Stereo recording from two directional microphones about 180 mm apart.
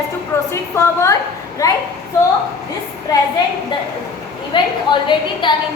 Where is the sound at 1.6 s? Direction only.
20° left (ahead or behind).